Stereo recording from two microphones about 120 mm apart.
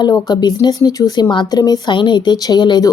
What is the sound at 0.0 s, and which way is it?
Speech, 35° left (ahead or behind).